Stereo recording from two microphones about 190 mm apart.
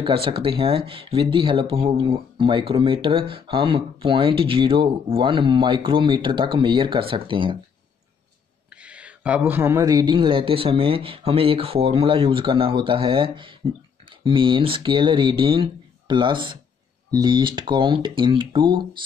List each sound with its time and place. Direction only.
0.0 s speech: 30° right (ahead or behind)
8.8 s speech: 5° right (ahead or behind); by 18.9 s 25° right (ahead or behind)